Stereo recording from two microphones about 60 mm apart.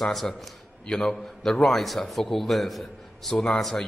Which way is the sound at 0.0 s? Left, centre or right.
Centre.